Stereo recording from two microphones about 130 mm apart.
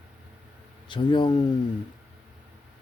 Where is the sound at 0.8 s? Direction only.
40° left (ahead or behind).